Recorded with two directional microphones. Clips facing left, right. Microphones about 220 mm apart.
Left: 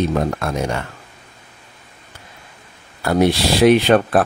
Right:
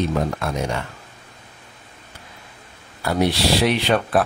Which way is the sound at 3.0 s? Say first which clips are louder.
Left 4 dB; 50° left (ahead or behind).